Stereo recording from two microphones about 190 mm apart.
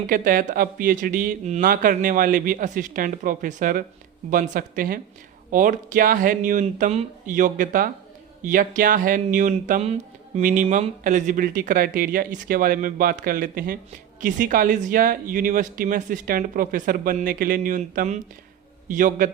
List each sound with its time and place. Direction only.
0.1 s speech: 45° right (ahead or behind)